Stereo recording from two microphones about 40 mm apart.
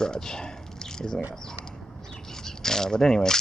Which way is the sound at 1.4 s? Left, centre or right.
Centre.